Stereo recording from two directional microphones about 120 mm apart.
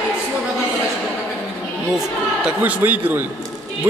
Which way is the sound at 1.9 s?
10° right (ahead or behind).